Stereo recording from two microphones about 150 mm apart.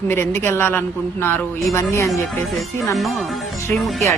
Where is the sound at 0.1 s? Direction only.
15° left (ahead or behind).